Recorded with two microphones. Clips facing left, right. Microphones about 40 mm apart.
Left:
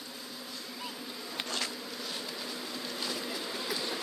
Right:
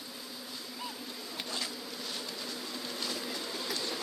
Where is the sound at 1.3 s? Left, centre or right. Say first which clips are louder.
Left 3 dB; left.